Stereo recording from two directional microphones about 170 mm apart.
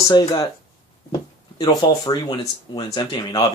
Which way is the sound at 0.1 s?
25° left (ahead or behind).